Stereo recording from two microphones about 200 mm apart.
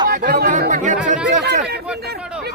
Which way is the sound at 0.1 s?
50° right (ahead or behind).